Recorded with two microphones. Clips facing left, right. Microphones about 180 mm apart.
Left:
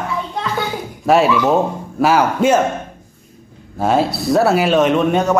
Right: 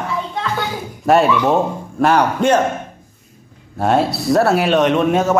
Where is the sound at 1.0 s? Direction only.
Centre (ahead or behind).